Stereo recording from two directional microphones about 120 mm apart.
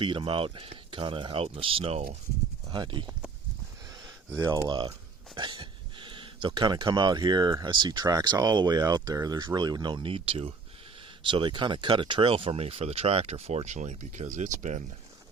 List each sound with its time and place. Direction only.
0.0 s speech: 45° right (ahead or behind)
2.7 s speech: 40° right (ahead or behind)
4.4 s speech: 25° right (ahead or behind)
4.7 s speech: 40° right (ahead or behind); by 14.5 s 90° right
14.6 s speech: 80° right